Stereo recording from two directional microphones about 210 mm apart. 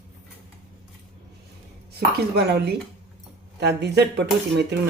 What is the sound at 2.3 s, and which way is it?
Speech, 50° right (ahead or behind).